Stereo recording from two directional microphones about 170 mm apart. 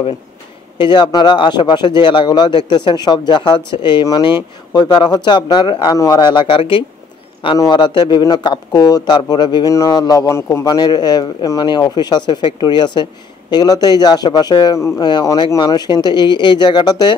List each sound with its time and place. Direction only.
0.7 s speech: 25° left (ahead or behind)